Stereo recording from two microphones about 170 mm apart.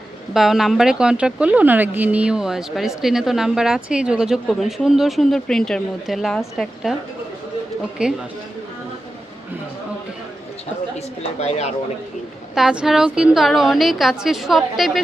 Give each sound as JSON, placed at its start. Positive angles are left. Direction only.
{"t": 0.3, "sound": "speech", "side_deg": 0}
{"t": 8.0, "sound": "speech", "side_deg": -5}
{"t": 10.9, "sound": "speech", "side_deg": 40}
{"t": 12.5, "sound": "speech", "side_deg": -5}